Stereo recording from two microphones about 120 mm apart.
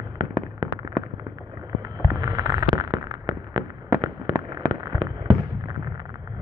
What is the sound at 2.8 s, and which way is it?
Fireworks, 35° right (ahead or behind).